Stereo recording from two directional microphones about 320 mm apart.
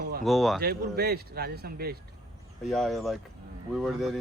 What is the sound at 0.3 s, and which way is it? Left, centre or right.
Speech, centre.